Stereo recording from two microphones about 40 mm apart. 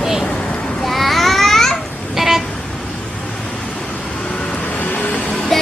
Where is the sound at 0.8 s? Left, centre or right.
Centre.